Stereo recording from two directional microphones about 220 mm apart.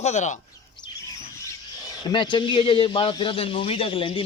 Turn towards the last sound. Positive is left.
turn(degrees=25)  # may be behind; listen again after turning